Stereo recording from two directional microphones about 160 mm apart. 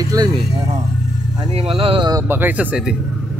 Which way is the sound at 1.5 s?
40° right (ahead or behind).